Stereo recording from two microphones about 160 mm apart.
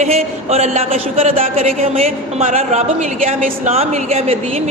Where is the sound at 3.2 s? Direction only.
55° right (ahead or behind).